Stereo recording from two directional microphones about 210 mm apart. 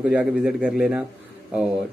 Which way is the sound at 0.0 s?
5° right (ahead or behind).